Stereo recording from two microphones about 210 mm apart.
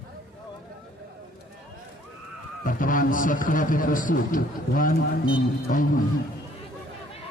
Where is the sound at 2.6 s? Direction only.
40° left (ahead or behind).